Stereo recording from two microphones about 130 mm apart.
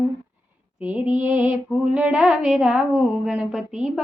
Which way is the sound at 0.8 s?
10° right (ahead or behind).